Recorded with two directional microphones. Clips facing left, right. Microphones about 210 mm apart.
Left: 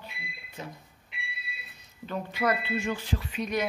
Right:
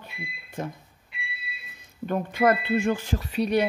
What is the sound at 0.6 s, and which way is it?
Speech, 50° right (ahead or behind).